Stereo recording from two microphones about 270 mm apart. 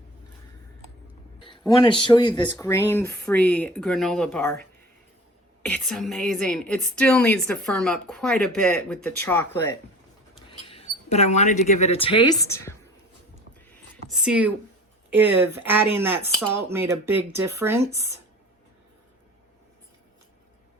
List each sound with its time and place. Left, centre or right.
1.4 s a woman's voice: centre
5.6 s a woman's voice: centre
10.7 s speech: left
14.1 s a woman's voice: centre